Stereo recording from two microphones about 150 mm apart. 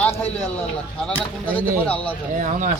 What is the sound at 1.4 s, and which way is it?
Speech, 10° left (ahead or behind).